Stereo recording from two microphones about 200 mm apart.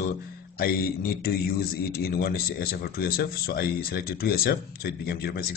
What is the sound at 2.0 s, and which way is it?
Speech, 50° left (ahead or behind).